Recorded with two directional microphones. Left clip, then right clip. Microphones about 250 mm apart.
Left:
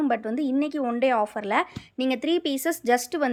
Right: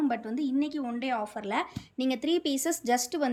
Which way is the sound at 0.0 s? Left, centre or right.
Centre.